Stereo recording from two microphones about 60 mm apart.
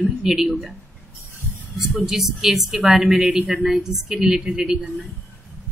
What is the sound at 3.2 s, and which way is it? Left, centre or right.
Speech, centre.